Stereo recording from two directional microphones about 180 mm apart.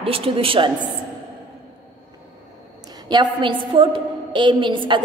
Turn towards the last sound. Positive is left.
turn(degrees=-25)  # may be behind; listen again after turning